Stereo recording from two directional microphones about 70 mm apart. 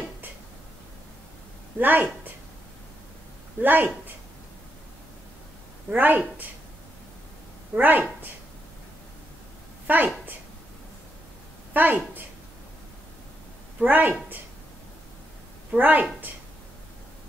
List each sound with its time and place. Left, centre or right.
1.8 s speech: right
3.6 s speech: right
5.9 s speech: right
7.7 s speech: right
9.8 s a woman's voice: right
11.7 s a woman's voice: right
13.8 s speech: right
15.7 s speech: right